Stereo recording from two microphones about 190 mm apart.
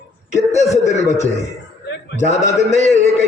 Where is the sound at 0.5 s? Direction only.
35° left (ahead or behind).